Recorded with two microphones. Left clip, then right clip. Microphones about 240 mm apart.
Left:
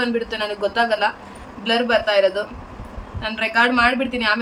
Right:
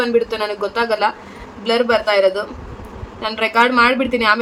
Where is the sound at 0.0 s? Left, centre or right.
Centre.